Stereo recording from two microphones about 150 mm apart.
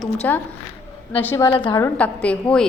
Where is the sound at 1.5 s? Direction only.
35° left (ahead or behind).